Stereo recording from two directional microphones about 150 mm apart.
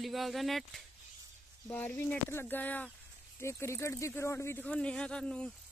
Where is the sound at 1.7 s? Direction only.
10° left (ahead or behind).